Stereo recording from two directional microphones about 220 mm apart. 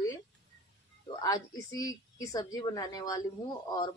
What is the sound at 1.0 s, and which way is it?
A woman's voice, 15° left (ahead or behind).